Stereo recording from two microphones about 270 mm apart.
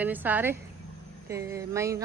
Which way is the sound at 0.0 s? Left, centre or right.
Centre.